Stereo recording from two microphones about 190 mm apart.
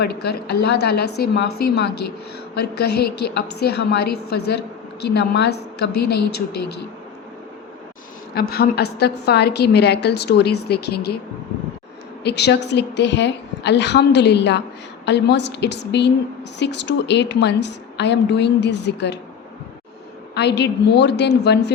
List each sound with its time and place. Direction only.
0.0 s a woman's voice: 55° left (ahead or behind)
8.4 s a woman's voice: 55° left (ahead or behind)
12.2 s a woman's voice: 60° left (ahead or behind)
20.3 s a woman's voice: 65° left (ahead or behind)